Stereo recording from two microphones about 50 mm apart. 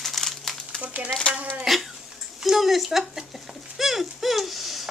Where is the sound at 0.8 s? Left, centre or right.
Right.